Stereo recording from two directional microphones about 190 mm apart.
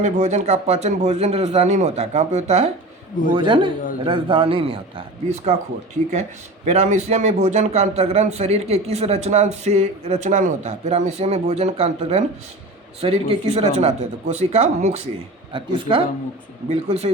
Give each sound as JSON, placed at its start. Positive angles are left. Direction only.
{"t": 0.0, "sound": "a man's voice", "side_deg": -40}
{"t": 3.3, "sound": "a man's voice", "side_deg": -25}
{"t": 6.7, "sound": "a man's voice", "side_deg": -35}